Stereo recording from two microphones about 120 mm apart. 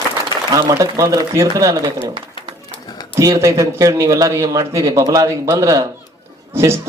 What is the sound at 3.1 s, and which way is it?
A man's voice, 25° right (ahead or behind).